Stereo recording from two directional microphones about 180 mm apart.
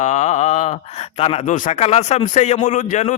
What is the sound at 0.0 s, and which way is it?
Speech, 40° left (ahead or behind).